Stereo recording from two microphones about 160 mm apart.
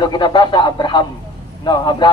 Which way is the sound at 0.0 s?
25° left (ahead or behind).